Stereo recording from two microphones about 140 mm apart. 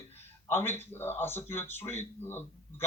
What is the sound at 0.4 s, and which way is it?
Speech, 15° left (ahead or behind).